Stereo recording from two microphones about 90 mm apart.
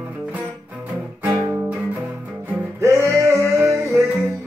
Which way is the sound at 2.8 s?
30° right (ahead or behind).